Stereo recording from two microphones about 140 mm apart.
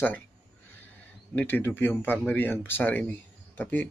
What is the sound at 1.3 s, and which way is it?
Speech, 15° left (ahead or behind).